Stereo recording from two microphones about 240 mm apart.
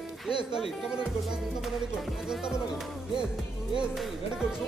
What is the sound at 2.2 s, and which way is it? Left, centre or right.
Speech, centre.